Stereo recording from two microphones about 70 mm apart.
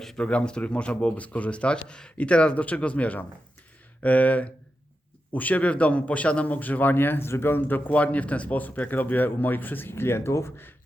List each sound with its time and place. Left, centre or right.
0.0 s speech: centre
0.3 s speech: centre; by 10.8 s left